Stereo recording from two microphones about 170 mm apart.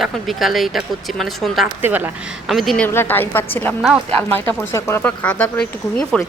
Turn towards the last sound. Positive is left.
turn(degrees=5)  # may be behind; listen again after turning